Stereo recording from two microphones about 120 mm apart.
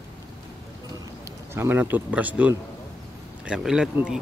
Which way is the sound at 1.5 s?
20° right (ahead or behind).